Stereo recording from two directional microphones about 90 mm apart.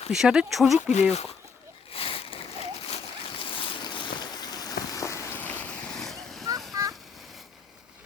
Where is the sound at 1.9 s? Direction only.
90° left.